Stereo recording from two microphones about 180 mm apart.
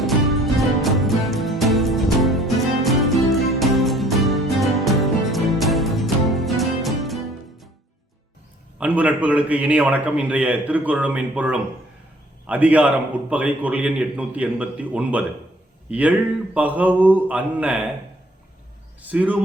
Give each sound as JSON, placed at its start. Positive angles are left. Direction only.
{"t": 0.0, "sound": "music", "side_deg": 0}
{"t": 8.8, "sound": "a man's voice", "side_deg": -10}
{"t": 19.0, "sound": "a man's voice", "side_deg": -10}